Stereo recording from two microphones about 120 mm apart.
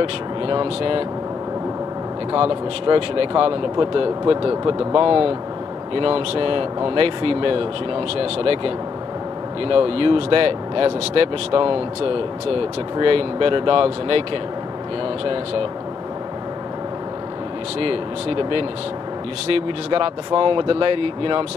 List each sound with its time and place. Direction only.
0.0 s speech: 45° right (ahead or behind)
2.3 s speech: 50° right (ahead or behind)
17.7 s speech: 50° right (ahead or behind)